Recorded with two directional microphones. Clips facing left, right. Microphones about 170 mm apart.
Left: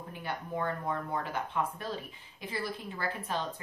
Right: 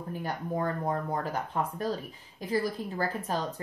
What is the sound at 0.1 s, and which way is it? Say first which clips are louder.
Speech: right 4 dB; 40° right (ahead or behind).